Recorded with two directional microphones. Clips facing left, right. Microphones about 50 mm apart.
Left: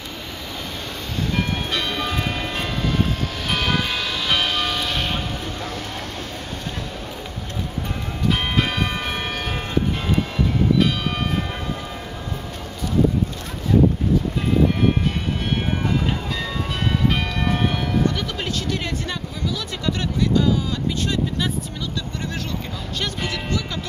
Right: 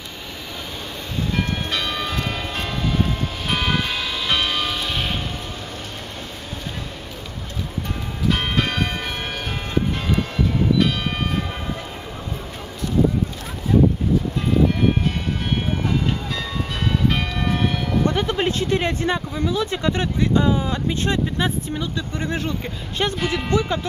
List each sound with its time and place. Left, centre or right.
1.3 s train: centre
3.4 s music: centre
8.3 s church bell: centre
17.1 s music: centre
18.0 s a sound: right
21.0 s speech: right
23.3 s speech: right